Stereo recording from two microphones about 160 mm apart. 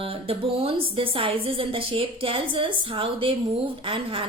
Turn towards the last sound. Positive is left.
turn(degrees=-35)  # may be behind; listen again after turning